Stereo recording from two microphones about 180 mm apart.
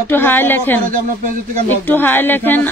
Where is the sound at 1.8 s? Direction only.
10° left (ahead or behind).